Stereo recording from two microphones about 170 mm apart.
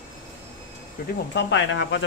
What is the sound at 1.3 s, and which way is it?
Speech, 90° left.